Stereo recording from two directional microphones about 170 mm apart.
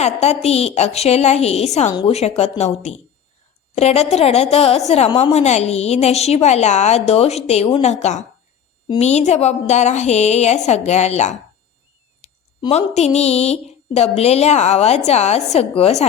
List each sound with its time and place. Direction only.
0.0 s a woman's voice: 40° left (ahead or behind)